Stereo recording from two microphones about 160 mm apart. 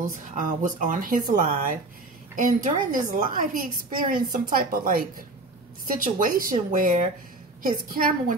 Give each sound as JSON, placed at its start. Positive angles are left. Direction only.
{"t": 0.3, "sound": "a woman's voice", "side_deg": -55}